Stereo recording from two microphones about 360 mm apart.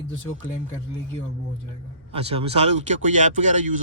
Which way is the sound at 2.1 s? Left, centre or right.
Centre.